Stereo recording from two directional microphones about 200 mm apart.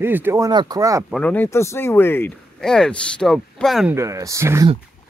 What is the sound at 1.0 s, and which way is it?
Speech, 5° left (ahead or behind).